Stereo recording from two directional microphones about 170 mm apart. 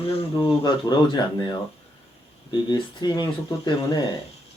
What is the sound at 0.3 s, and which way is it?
Speech, 25° left (ahead or behind).